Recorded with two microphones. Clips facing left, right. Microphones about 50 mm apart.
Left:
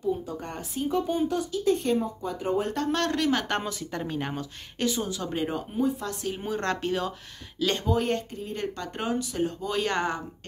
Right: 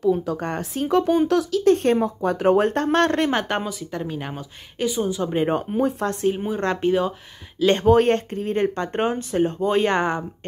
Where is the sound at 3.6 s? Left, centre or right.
Centre; by 5.4 s right.